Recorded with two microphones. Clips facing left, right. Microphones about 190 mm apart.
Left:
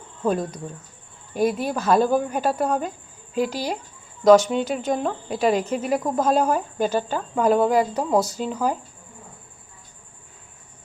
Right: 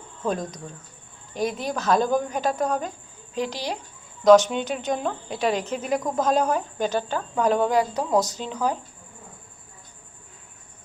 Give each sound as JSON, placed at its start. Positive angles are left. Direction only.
{"t": 0.2, "sound": "a woman's voice", "side_deg": 5}